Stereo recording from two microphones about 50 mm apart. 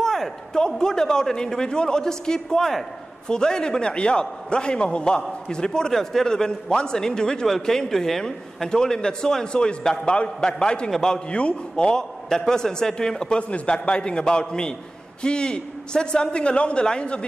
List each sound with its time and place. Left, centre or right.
0.0 s a man's voice: centre